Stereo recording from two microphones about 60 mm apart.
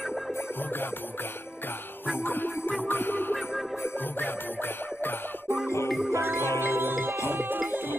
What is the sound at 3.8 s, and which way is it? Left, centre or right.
Music, left.